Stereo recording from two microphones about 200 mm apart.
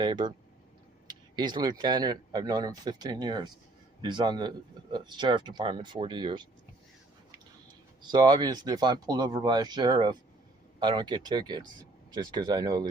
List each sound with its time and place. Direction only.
0.0 s speech: 25° right (ahead or behind)
8.0 s speech: 20° right (ahead or behind)